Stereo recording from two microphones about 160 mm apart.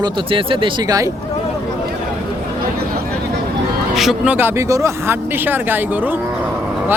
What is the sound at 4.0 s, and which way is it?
Speech, 5° right (ahead or behind).